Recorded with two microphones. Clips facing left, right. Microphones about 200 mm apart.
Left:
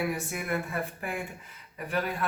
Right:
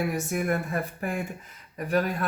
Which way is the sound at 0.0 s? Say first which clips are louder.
Right 4 dB; 45° right (ahead or behind).